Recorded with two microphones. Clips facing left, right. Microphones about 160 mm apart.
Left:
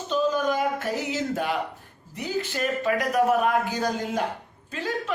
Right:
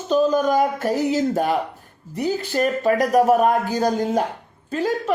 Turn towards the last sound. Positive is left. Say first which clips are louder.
# right 9 dB
turn(degrees=-45)  # may be behind; listen again after turning